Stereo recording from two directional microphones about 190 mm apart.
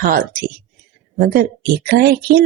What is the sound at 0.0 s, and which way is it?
Speech, 45° right (ahead or behind).